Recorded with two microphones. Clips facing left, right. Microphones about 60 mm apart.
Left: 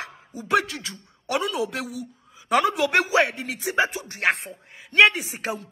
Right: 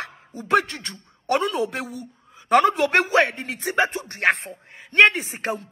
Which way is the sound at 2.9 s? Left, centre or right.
Right.